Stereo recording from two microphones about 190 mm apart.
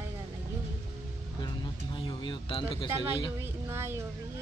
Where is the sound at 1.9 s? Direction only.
25° left (ahead or behind).